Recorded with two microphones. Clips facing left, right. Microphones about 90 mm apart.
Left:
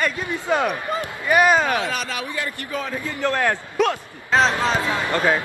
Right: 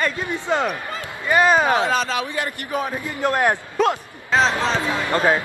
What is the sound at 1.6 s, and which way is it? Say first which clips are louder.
A man's voice: right 4 dB; 25° right (ahead or behind).